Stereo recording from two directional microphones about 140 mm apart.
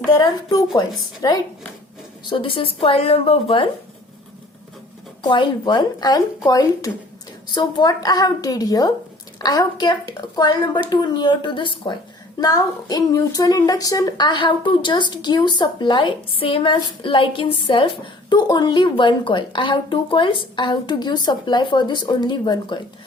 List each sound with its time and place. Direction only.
0.1 s a woman's voice: 25° left (ahead or behind)
5.2 s a woman's voice: 35° left (ahead or behind)